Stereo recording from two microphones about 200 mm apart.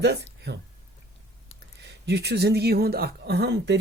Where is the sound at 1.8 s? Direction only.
55° right (ahead or behind).